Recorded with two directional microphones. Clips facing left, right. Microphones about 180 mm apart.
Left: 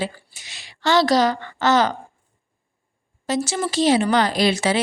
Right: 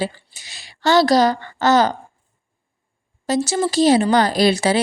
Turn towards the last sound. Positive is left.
turn(degrees=-35)  # may be behind; listen again after turning